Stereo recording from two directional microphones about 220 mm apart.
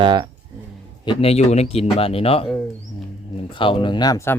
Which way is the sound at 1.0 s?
25° left (ahead or behind).